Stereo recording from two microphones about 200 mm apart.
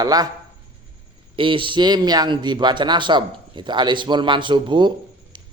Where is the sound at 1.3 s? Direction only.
25° right (ahead or behind).